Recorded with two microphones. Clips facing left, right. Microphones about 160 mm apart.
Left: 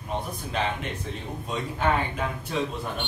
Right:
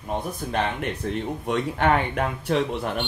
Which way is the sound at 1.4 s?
70° right (ahead or behind).